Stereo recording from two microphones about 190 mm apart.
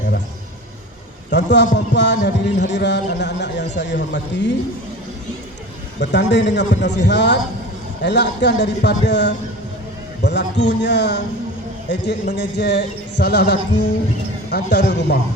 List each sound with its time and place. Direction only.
1.3 s a man's voice: 65° left (ahead or behind)
6.0 s a man's voice: 65° left (ahead or behind)